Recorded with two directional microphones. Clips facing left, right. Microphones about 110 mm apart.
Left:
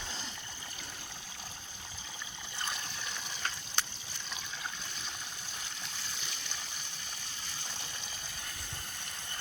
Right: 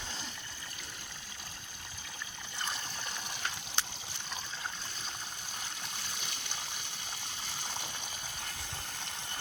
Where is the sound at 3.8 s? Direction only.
25° right (ahead or behind).